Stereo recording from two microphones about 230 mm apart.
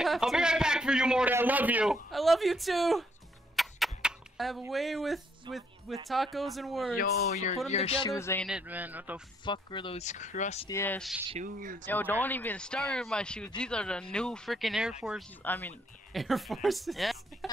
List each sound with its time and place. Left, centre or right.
0.0 s a man's voice: centre
3.5 s a sound: centre
6.0 s speech: centre
7.0 s speech: left
8.1 s speech: centre
8.5 s a man's voice: centre
9.4 s speech: left
10.7 s speech: centre
11.2 s speech: right
11.9 s speech: centre